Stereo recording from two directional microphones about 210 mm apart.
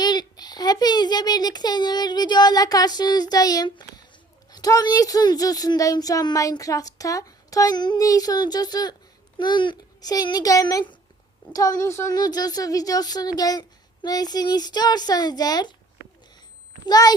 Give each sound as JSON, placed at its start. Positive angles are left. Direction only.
{"t": 0.0, "sound": "a sound", "side_deg": 20}
{"t": 4.5, "sound": "a woman's voice", "side_deg": 20}
{"t": 16.8, "sound": "a woman's voice", "side_deg": 20}